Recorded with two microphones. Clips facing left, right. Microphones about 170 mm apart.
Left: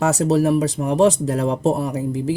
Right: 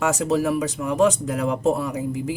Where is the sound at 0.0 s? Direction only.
35° left (ahead or behind).